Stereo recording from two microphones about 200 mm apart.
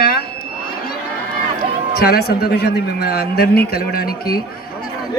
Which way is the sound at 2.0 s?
55° left (ahead or behind).